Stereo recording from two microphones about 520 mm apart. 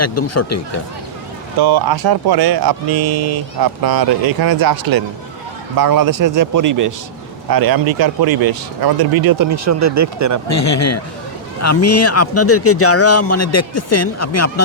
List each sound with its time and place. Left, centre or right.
0.0 s speech: left
1.5 s speech: right
10.5 s a man's voice: left